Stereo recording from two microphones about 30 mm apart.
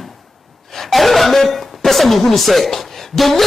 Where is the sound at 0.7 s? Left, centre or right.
Centre.